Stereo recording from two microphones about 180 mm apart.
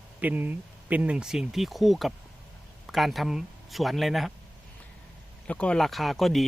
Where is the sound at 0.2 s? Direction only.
10° right (ahead or behind).